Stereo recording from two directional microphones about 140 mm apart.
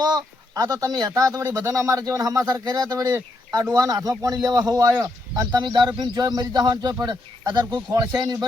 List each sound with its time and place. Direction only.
0.0 s speech: 25° right (ahead or behind)